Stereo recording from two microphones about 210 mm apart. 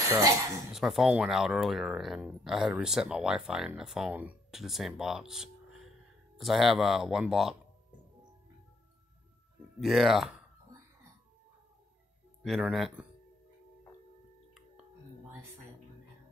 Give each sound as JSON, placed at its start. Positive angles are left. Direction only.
{"t": 0.0, "sound": "speech", "side_deg": -15}
{"t": 0.7, "sound": "speech", "side_deg": 0}
{"t": 9.8, "sound": "speech", "side_deg": 0}
{"t": 12.4, "sound": "speech", "side_deg": 0}